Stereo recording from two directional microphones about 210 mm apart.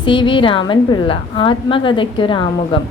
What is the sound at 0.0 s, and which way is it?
A woman's voice, 20° left (ahead or behind).